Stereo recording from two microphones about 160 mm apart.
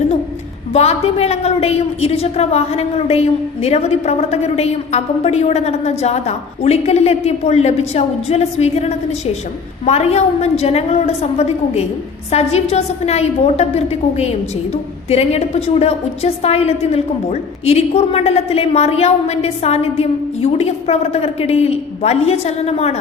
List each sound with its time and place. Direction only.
0.7 s a woman's voice: 40° left (ahead or behind)